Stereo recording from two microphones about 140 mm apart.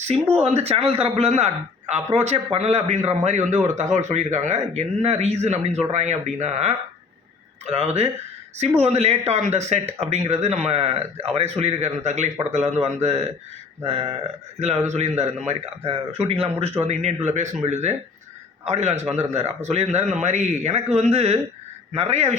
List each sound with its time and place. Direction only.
0.0 s speech: 50° right (ahead or behind)
14.8 s speech: 55° right (ahead or behind)